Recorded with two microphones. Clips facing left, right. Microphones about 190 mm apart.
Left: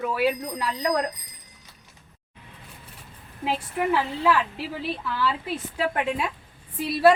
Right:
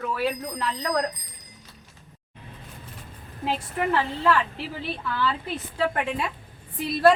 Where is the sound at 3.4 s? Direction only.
5° left (ahead or behind).